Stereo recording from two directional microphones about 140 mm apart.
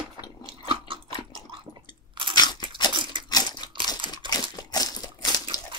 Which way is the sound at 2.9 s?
35° right (ahead or behind).